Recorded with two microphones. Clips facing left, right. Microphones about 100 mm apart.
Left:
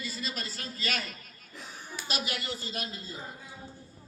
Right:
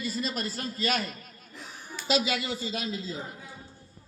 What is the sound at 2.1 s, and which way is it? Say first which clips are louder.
Speech: right 9 dB; 90° right.